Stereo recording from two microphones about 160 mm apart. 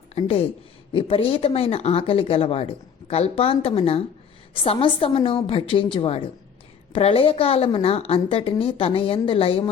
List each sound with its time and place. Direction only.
0.1 s a woman's voice: 35° left (ahead or behind)